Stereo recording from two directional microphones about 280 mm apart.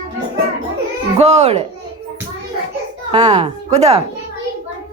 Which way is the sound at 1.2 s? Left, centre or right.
Right.